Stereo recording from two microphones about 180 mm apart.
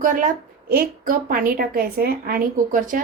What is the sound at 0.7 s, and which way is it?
A woman's voice, 50° right (ahead or behind).